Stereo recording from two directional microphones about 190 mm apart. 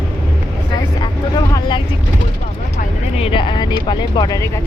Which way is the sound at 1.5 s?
25° left (ahead or behind).